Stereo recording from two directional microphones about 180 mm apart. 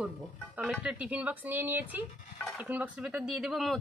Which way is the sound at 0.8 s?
5° right (ahead or behind).